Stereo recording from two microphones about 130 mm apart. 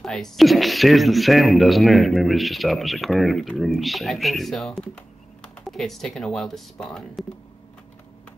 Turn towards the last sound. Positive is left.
turn(degrees=0)  # may be behind; listen again after turning